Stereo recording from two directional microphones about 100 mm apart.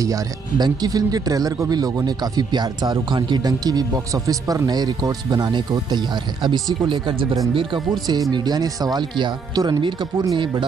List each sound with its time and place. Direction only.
0.0 s speech: 40° right (ahead or behind)